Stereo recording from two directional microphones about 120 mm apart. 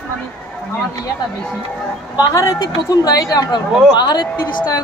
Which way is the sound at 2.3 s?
30° left (ahead or behind).